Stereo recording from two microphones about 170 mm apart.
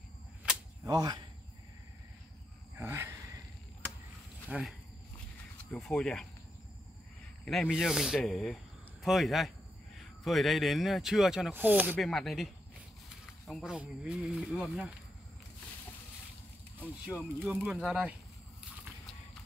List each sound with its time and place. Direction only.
0.8 s speech: 25° right (ahead or behind)
2.8 s a sound: 15° right (ahead or behind)
4.5 s speech: 5° right (ahead or behind)
7.4 s speech: 5° left (ahead or behind)
11.9 s speech: centre (ahead or behind)
13.5 s speech: centre (ahead or behind)
17.0 s speech: 10° right (ahead or behind)